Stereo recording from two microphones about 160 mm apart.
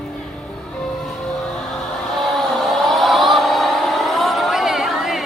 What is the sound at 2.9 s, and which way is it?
Vehicle, centre (ahead or behind).